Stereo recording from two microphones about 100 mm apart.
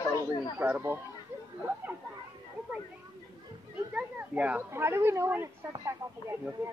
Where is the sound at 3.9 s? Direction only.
15° right (ahead or behind).